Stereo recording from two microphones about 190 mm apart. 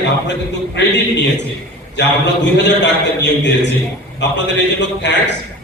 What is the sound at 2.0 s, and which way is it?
A man's voice, 70° left (ahead or behind).